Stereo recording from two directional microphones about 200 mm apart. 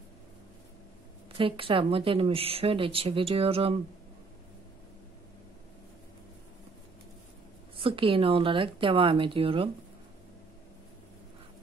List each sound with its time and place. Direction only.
1.4 s a woman's voice: 25° right (ahead or behind)
7.8 s a woman's voice: 25° right (ahead or behind)